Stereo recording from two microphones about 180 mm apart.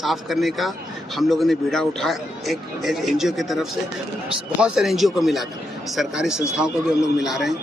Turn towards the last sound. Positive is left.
turn(degrees=0)  # may be behind; listen again after turning